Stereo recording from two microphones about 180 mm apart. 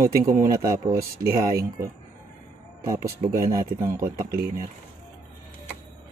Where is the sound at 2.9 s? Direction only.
20° right (ahead or behind).